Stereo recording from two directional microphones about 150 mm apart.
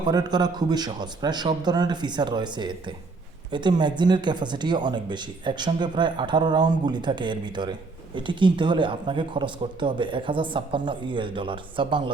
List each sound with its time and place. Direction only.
0.0 s a man's voice: 25° right (ahead or behind)